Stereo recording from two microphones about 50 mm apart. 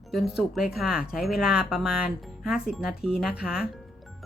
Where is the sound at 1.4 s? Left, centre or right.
Centre.